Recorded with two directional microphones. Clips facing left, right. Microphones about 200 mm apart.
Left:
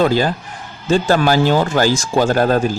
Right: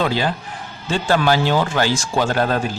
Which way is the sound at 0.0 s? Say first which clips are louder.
Left 5 dB; 40° left (ahead or behind).